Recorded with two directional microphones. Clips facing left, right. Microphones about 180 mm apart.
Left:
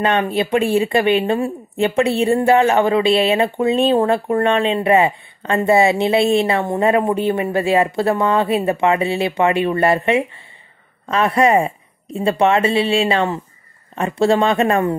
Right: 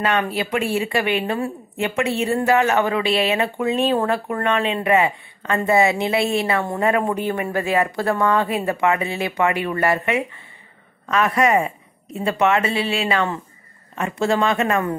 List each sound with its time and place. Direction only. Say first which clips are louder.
0.0 s a woman's voice: left 4 dB; 30° left (ahead or behind)